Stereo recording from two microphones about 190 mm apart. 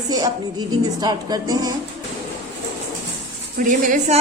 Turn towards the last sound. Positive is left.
turn(degrees=-40)  # may be behind; listen again after turning